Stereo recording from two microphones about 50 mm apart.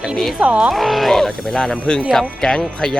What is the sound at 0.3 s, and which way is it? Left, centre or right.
Speech, centre.